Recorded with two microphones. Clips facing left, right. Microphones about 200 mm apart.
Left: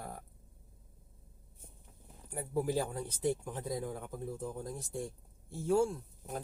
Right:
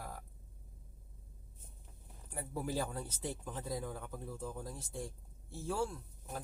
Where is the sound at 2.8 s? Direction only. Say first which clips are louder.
Left 5 dB; 15° left (ahead or behind).